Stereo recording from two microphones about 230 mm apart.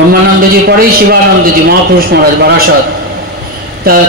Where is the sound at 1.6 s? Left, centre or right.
Right.